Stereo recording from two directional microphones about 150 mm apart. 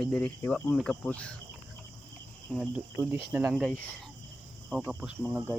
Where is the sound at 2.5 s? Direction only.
5° left (ahead or behind).